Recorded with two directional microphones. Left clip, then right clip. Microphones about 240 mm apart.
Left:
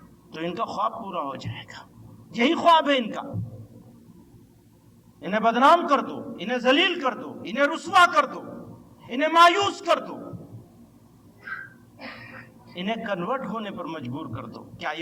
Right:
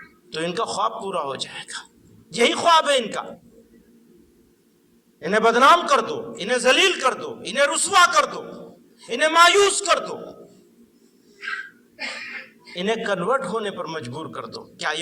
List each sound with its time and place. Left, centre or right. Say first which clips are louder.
0.3 s a man's voice: right 4 dB; right
5.2 s a man's voice: right 4 dB; right
12.7 s a man's voice: right 6 dB; right